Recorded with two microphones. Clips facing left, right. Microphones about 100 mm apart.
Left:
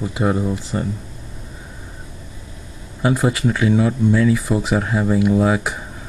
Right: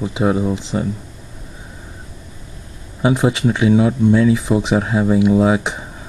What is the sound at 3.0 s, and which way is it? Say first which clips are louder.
Speech: right 2 dB; 15° right (ahead or behind).